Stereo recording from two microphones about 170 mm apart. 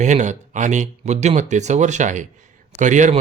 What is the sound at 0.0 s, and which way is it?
A man's voice, 45° right (ahead or behind).